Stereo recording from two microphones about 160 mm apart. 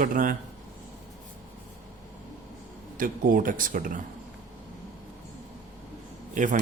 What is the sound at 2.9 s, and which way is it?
Speech, 60° right (ahead or behind).